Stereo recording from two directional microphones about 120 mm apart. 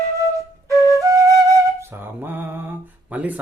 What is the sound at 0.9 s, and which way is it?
Music, 25° right (ahead or behind).